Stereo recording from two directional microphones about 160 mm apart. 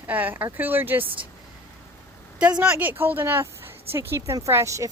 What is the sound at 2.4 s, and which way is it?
A woman's voice, 10° right (ahead or behind).